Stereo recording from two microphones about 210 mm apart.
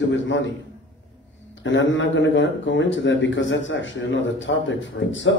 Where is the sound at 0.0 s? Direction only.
60° left (ahead or behind).